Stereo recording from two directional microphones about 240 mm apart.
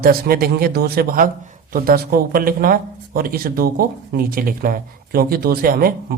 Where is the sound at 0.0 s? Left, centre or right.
Right.